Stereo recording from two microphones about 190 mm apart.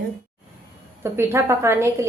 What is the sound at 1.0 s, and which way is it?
A woman's voice, 15° right (ahead or behind).